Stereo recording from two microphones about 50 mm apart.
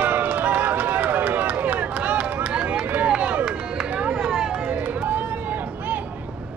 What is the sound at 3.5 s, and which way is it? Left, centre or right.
Run, centre.